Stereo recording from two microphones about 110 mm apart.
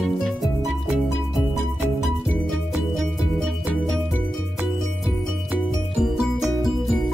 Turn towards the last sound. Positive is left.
turn(degrees=-5)  # may be behind; listen again after turning